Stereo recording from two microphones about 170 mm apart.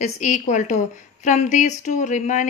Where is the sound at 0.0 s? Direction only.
45° left (ahead or behind).